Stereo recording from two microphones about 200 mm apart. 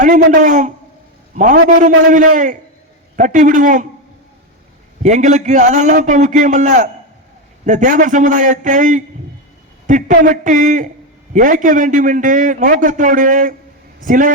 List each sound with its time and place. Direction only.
0.0 s a man's voice: 40° right (ahead or behind)
2.0 s a man's voice: 40° right (ahead or behind)
5.0 s a man's voice: 35° right (ahead or behind)